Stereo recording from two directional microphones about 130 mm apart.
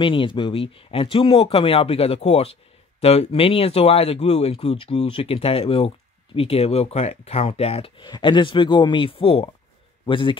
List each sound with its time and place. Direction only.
0.0 s speech: 40° left (ahead or behind)
8.0 s a man's voice: 35° left (ahead or behind)